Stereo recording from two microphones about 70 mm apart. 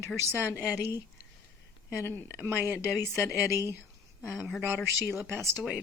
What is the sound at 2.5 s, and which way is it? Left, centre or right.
Speech, right.